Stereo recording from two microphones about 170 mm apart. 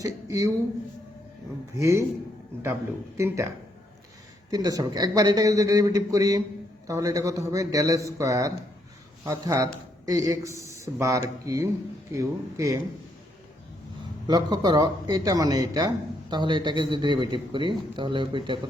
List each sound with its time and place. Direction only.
0.0 s speech: 20° right (ahead or behind)
1.7 s speech: 15° right (ahead or behind)
3.2 s speech: 15° right (ahead or behind)
4.5 s a man's voice: 20° right (ahead or behind)
14.3 s a man's voice: 25° right (ahead or behind)